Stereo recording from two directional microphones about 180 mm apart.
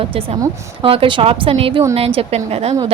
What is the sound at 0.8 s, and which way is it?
A woman's voice, 30° right (ahead or behind).